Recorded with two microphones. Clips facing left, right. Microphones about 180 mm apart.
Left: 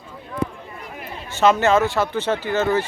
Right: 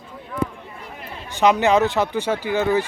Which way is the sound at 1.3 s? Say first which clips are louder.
Even; 15° right (ahead or behind).